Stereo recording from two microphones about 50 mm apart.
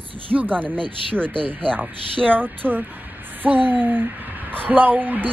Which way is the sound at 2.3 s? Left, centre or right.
Right.